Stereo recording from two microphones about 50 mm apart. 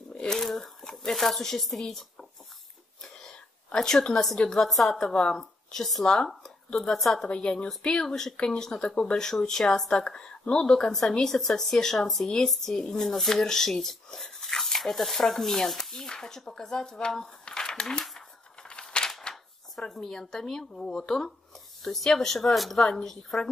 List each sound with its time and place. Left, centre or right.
0.1 s crumpling: centre
0.4 s speech: centre
3.0 s a sound: centre
4.5 s speech: centre
7.2 s speech: centre
18.6 s a sound: centre
19.9 s speech: centre